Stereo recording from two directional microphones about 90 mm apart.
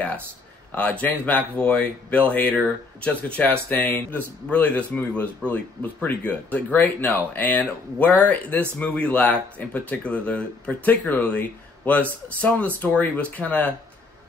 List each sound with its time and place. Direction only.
0.7 s a man's voice: 15° left (ahead or behind)